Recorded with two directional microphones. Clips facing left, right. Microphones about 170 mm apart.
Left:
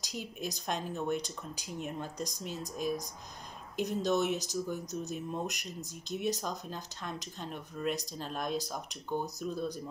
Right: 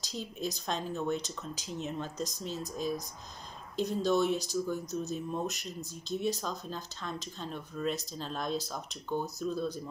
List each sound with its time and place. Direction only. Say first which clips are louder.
0.1 s speech: right 2 dB; 15° left (ahead or behind)